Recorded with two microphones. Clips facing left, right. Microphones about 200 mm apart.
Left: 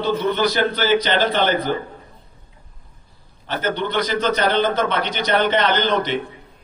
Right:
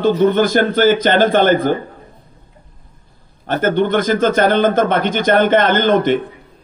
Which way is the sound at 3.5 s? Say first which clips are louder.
Right 8 dB; 50° right (ahead or behind).